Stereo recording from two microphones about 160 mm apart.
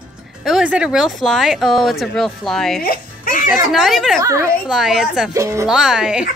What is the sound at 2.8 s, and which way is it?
Speech, 65° left (ahead or behind).